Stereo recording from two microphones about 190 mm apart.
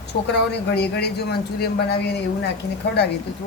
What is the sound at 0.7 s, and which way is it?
Speech, 60° left (ahead or behind).